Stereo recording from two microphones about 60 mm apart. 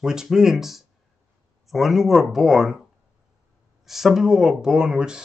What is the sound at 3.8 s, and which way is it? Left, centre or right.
Speech, centre.